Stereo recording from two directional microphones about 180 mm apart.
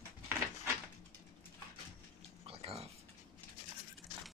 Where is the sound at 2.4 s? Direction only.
35° right (ahead or behind).